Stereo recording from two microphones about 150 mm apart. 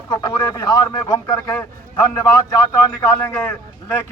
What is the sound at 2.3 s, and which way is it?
A man's voice, 20° left (ahead or behind).